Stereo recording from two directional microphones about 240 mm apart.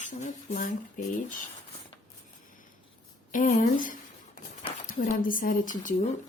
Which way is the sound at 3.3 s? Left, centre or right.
Left.